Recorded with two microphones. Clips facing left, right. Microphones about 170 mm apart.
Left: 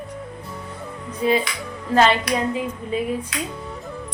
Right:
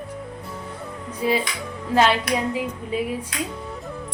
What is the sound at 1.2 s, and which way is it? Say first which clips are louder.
Music: left 2 dB; 5° right (ahead or behind).